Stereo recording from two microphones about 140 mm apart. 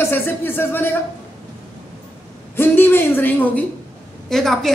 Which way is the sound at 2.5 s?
15° left (ahead or behind).